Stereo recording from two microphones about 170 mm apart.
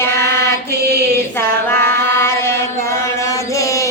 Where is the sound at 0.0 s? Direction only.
15° left (ahead or behind).